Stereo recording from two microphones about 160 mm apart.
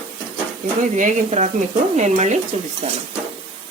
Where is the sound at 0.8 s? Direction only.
50° right (ahead or behind).